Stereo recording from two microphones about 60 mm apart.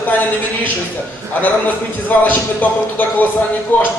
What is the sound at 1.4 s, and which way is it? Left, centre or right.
A man's voice, left.